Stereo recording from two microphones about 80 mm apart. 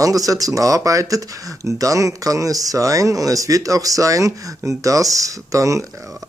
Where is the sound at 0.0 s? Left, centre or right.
Right.